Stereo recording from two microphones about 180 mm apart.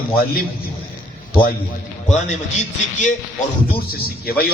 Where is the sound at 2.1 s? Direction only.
40° left (ahead or behind).